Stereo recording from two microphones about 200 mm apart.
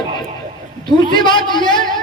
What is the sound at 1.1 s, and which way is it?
Speech, 25° left (ahead or behind).